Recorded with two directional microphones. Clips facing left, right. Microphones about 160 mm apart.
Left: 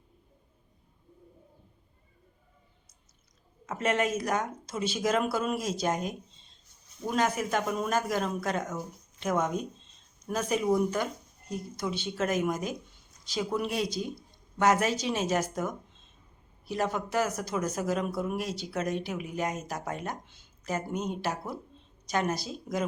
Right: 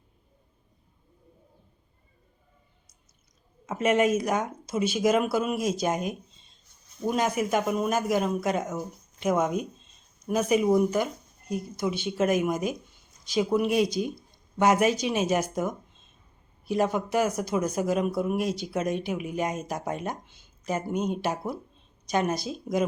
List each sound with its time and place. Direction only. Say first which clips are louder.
3.7 s speech: right 5 dB; 15° right (ahead or behind)